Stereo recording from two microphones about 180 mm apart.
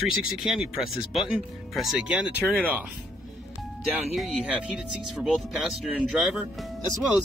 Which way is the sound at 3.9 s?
Centre (ahead or behind).